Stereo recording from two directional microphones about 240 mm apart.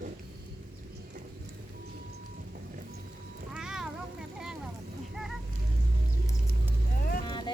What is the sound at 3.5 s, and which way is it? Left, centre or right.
Cat, centre.